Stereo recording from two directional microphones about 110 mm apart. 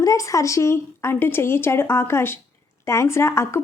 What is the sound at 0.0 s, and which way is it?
A woman's voice, 30° left (ahead or behind).